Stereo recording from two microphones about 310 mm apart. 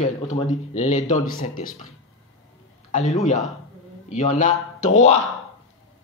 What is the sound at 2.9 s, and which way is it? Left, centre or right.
Speech, left.